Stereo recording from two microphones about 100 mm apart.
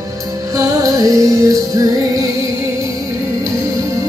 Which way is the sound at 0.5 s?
35° right (ahead or behind).